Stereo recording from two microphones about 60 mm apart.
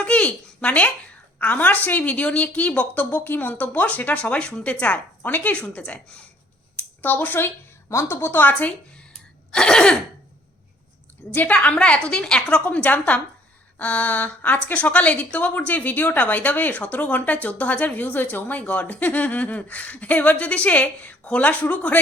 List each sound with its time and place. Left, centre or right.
0.0 s a sound: left
1.4 s a woman's voice: left
7.0 s a woman's voice: left
7.9 s a woman's voice: left
9.5 s cough: centre
11.3 s a woman's voice: left